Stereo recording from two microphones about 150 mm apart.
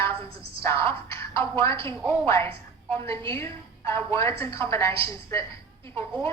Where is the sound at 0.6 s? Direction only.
20° left (ahead or behind).